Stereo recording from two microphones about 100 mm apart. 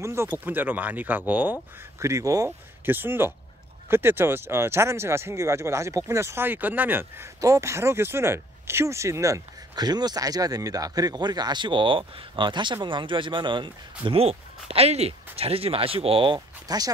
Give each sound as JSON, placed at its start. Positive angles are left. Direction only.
{"t": 0.0, "sound": "speech", "side_deg": -25}
{"t": 2.0, "sound": "speech", "side_deg": -30}
{"t": 2.8, "sound": "speech", "side_deg": -20}
{"t": 7.3, "sound": "speech", "side_deg": -35}
{"t": 14.2, "sound": "speech", "side_deg": -85}
{"t": 16.3, "sound": "speech", "side_deg": -40}